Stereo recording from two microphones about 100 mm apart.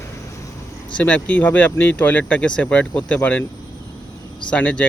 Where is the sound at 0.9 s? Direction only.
10° left (ahead or behind).